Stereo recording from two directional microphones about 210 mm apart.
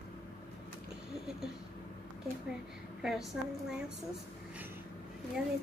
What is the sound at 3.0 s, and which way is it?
Speech, centre (ahead or behind).